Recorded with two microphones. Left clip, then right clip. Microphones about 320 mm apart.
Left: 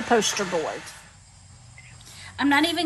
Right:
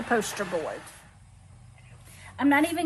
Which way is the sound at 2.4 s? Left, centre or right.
Centre.